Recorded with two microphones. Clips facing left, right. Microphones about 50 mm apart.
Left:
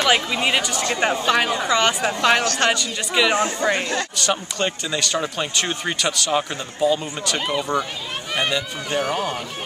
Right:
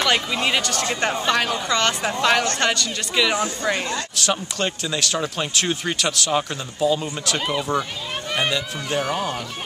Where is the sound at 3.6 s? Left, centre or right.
Left.